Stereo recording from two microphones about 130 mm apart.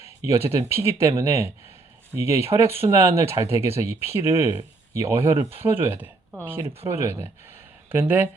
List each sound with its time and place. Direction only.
0.3 s speech: 20° right (ahead or behind)